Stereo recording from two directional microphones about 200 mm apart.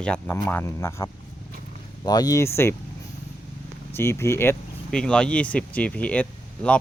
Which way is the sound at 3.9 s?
15° left (ahead or behind).